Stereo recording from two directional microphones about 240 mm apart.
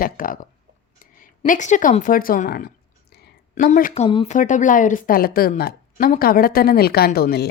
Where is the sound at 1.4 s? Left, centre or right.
Left.